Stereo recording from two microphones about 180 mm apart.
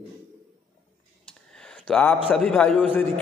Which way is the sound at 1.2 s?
5° left (ahead or behind).